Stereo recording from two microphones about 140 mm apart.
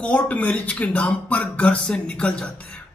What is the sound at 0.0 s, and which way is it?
Speech, 10° left (ahead or behind).